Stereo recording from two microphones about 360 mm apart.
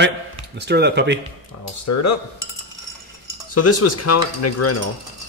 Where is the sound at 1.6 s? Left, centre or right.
Left.